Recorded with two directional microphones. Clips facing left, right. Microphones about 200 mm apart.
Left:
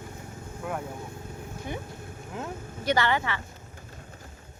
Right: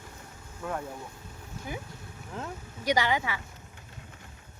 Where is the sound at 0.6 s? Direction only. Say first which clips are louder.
Left 1 dB; 15° left (ahead or behind).